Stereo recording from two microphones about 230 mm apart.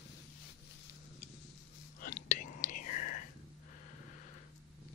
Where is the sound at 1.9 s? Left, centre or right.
Left.